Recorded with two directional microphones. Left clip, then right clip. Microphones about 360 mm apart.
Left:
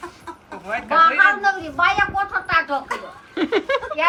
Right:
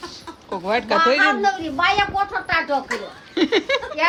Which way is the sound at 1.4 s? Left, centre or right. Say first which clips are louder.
Left 1 dB; right.